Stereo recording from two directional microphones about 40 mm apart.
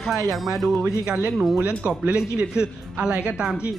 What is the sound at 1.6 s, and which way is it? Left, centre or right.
Speech, right.